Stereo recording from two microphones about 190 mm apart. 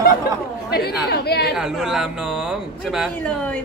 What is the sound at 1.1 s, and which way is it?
Speech, 55° left (ahead or behind).